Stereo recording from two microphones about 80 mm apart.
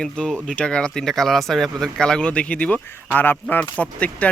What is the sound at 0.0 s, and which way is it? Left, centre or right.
Speech, centre.